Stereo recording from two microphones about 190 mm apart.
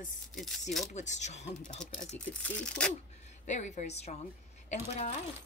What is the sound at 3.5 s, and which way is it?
Speech, 40° left (ahead or behind).